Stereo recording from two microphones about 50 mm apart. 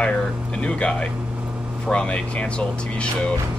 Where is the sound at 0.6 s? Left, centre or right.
Left.